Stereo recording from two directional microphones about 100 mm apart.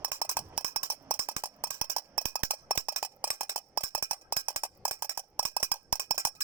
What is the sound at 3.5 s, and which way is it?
Cowbell, 20° right (ahead or behind).